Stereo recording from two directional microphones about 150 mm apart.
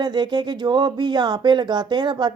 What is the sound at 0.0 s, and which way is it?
Speech, 30° right (ahead or behind).